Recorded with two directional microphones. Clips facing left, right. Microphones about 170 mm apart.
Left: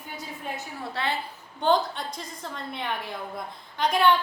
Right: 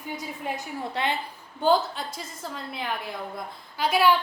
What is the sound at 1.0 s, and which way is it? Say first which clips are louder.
Speech: right 2 dB; 20° right (ahead or behind).